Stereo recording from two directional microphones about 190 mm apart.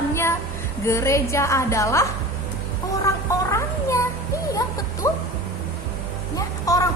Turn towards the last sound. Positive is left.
turn(degrees=20)  # may be behind; listen again after turning